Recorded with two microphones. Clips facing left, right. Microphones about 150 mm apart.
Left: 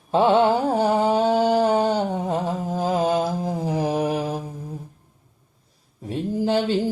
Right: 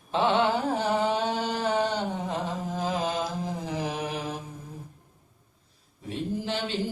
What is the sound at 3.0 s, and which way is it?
Mantra, 45° left (ahead or behind).